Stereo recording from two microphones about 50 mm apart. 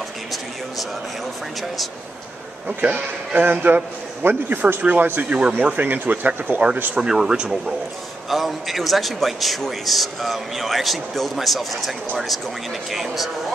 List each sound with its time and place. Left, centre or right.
2.8 s speech: right
3.4 s a man's voice: right
7.0 s speech: centre
8.3 s a man's voice: centre
12.9 s a man's voice: centre